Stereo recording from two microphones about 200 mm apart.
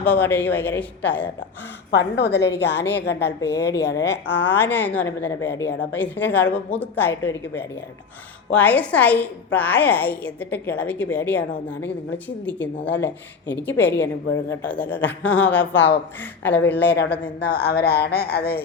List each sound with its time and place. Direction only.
0.0 s a woman's voice: 10° left (ahead or behind)
1.9 s a woman's voice: 55° left (ahead or behind)
4.3 s a woman's voice: 10° left (ahead or behind)
16.8 s a woman's voice: 55° left (ahead or behind)